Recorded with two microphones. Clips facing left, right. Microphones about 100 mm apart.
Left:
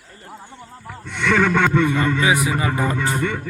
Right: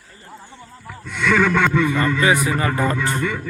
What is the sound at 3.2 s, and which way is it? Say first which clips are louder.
Speech: even; 35° left (ahead or behind).